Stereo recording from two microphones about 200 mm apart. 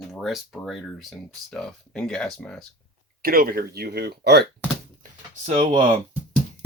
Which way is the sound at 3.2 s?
50° right (ahead or behind).